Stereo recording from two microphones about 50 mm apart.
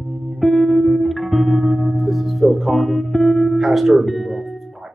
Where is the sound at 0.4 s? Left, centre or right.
Centre.